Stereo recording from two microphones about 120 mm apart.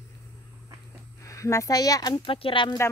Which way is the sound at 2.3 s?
50° left (ahead or behind).